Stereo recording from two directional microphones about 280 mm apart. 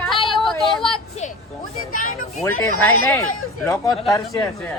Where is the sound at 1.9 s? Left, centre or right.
Left.